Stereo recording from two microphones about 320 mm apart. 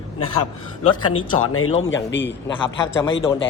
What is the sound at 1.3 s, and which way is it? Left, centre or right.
Speech, left.